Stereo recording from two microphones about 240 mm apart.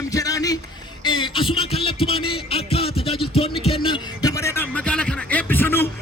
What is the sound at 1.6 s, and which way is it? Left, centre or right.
Music, left.